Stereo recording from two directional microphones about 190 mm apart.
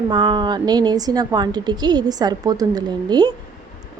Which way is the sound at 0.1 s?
25° right (ahead or behind).